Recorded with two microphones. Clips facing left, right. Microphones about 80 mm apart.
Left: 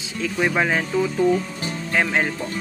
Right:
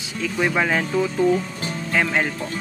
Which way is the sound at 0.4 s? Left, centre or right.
Centre.